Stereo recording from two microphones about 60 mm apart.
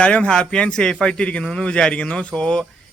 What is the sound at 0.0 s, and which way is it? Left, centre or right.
A man's voice, centre.